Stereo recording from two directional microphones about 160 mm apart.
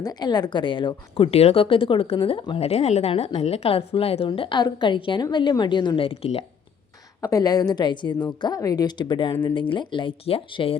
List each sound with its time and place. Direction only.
0.0 s a woman's voice: 25° left (ahead or behind)
7.2 s a woman's voice: 20° left (ahead or behind)